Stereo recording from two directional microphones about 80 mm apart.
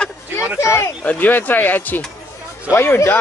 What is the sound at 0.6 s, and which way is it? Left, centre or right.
Speech, left.